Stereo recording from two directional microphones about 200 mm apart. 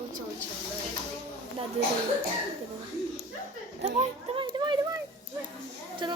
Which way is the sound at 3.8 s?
30° right (ahead or behind).